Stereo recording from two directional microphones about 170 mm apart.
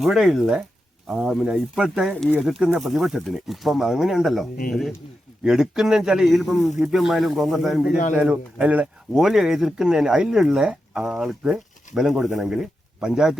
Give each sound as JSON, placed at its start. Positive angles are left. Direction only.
{"t": 0.0, "sound": "speech", "side_deg": 0}
{"t": 7.9, "sound": "speech", "side_deg": 50}
{"t": 8.1, "sound": "speech", "side_deg": -5}